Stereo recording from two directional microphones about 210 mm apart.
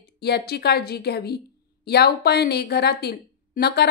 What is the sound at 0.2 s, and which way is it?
Speech, 50° left (ahead or behind).